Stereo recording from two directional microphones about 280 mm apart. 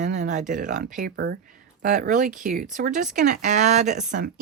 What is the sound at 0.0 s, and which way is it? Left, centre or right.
Speech, right.